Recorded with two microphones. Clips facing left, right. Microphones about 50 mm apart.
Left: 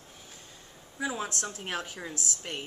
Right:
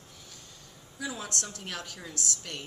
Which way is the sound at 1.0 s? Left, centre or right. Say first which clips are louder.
Left 3 dB; left.